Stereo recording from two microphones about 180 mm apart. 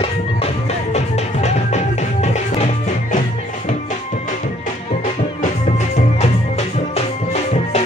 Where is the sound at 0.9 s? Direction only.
40° left (ahead or behind).